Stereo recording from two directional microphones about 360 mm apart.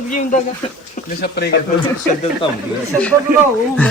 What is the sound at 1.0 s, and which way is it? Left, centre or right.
Speech, left.